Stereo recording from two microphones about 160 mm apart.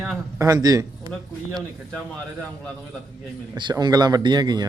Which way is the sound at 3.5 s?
25° right (ahead or behind).